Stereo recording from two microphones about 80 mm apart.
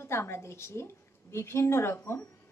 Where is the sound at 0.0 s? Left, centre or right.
Left.